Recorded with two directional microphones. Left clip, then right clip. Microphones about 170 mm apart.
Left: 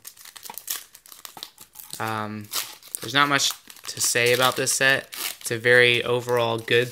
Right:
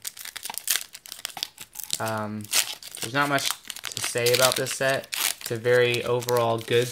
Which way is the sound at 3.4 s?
20° right (ahead or behind).